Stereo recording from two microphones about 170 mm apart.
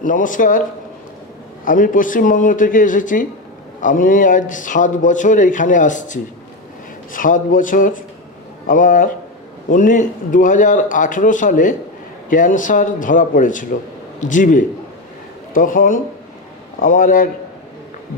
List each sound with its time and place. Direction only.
0.0 s speech: 50° left (ahead or behind)
1.6 s speech: 50° left (ahead or behind)